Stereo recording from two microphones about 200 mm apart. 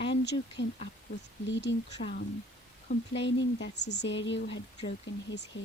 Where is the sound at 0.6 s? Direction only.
60° left (ahead or behind).